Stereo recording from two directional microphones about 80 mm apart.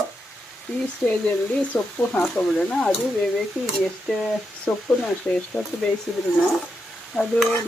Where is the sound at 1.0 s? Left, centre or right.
Left.